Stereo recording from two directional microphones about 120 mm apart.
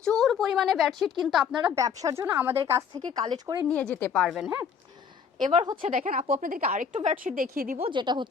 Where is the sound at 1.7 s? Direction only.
30° right (ahead or behind).